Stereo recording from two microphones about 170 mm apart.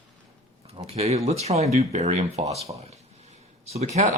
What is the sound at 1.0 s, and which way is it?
Speech, 40° right (ahead or behind).